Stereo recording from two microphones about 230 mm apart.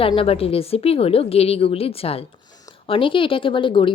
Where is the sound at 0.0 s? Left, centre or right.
Left.